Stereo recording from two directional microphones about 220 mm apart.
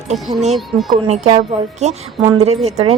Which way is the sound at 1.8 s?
30° right (ahead or behind).